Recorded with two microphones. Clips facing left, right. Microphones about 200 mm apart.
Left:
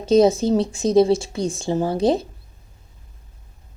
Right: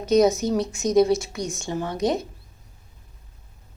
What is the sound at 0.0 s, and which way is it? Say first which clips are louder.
Speech: left 3 dB; 30° left (ahead or behind).